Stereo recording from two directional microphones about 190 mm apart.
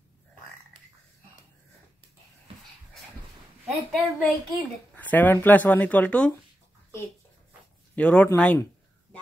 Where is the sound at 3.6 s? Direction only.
5° left (ahead or behind).